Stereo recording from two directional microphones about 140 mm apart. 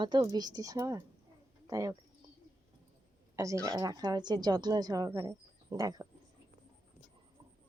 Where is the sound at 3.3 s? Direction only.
20° right (ahead or behind).